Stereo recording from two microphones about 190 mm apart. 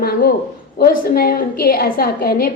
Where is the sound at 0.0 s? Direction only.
50° left (ahead or behind).